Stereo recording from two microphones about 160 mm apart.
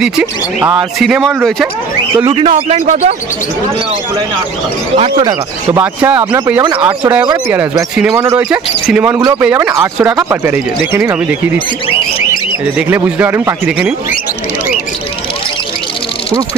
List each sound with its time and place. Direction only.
0.0 s speech: 5° right (ahead or behind)
2.2 s speech: 35° right (ahead or behind)
4.9 s speech: 35° right (ahead or behind)
5.8 s speech: 10° right (ahead or behind)
7.7 s speech: 5° right (ahead or behind)
8.1 s speech: 20° right (ahead or behind)
12.7 s speech: 10° right (ahead or behind)